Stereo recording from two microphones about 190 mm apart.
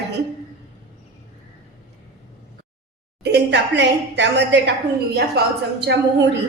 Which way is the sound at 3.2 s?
65° right (ahead or behind).